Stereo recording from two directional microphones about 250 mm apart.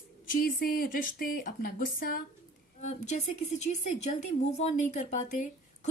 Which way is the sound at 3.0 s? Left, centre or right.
Left.